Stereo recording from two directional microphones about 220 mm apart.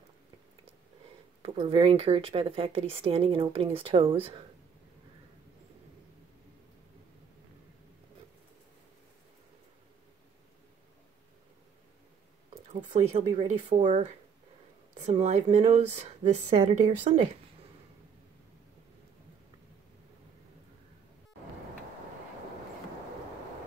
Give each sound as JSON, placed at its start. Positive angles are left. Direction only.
{"t": 1.4, "sound": "speech", "side_deg": -25}
{"t": 12.9, "sound": "speech", "side_deg": -30}